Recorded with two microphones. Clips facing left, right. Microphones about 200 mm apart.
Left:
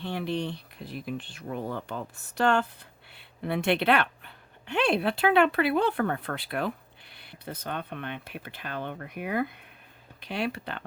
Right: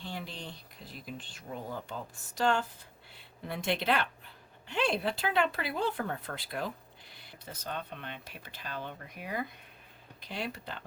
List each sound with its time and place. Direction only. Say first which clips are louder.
0.0 s speech: left 11 dB; 60° left (ahead or behind)